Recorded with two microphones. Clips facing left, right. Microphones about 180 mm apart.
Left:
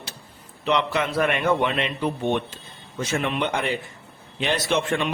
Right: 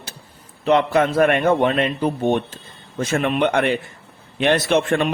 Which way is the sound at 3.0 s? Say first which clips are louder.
Right 6 dB; 55° right (ahead or behind).